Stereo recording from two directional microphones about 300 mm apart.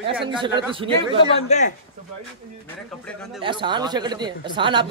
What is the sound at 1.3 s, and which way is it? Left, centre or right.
Speech, left.